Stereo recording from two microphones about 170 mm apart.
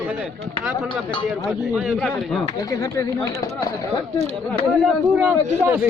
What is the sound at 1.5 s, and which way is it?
Speech, 5° right (ahead or behind).